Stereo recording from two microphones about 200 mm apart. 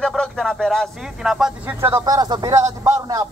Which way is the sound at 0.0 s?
Centre (ahead or behind).